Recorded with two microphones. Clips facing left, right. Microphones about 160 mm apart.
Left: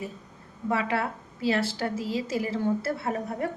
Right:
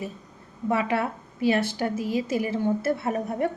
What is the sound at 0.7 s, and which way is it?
A woman's voice, 20° right (ahead or behind).